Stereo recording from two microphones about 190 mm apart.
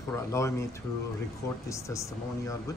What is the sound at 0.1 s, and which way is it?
Speech, 15° left (ahead or behind).